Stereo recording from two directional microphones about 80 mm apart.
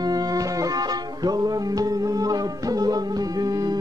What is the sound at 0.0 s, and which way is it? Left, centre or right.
Music, right.